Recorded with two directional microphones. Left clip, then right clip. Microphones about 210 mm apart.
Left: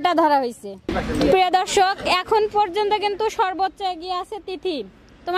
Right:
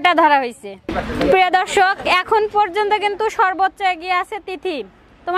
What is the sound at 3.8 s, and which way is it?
A woman's voice, 40° right (ahead or behind).